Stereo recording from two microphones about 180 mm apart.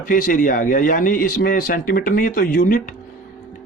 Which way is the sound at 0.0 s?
50° left (ahead or behind).